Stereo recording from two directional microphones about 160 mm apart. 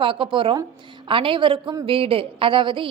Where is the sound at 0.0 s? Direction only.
30° right (ahead or behind).